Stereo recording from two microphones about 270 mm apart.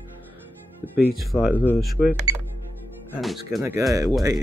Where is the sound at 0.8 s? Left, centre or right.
Centre.